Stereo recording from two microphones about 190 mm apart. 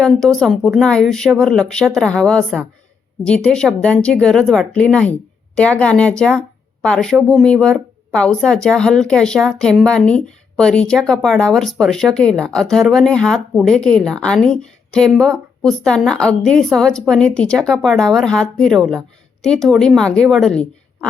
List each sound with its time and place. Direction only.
0.0 s speech: centre (ahead or behind)